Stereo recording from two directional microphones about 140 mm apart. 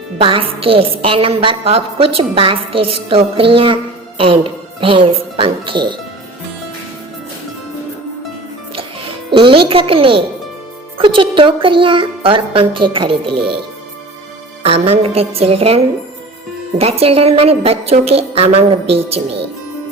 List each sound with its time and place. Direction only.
0.2 s a woman's voice: 40° right (ahead or behind)
8.7 s music: 40° right (ahead or behind)
10.9 s a woman's voice: 40° right (ahead or behind)
14.6 s a woman's voice: 45° right (ahead or behind)